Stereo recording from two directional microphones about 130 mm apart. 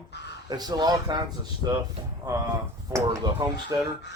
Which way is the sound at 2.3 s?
30° right (ahead or behind).